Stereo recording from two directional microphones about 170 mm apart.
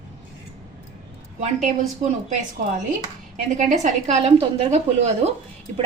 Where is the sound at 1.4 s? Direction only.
45° right (ahead or behind).